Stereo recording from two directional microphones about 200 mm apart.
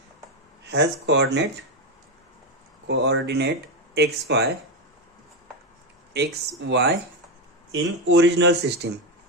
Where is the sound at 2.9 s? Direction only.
60° right (ahead or behind).